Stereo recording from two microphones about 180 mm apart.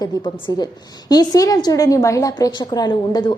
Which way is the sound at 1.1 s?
20° left (ahead or behind).